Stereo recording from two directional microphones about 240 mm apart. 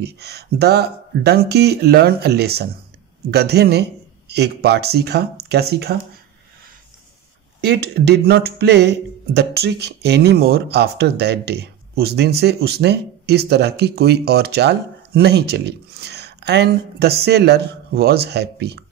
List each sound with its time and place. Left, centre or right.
0.0 s speech: right
7.6 s speech: right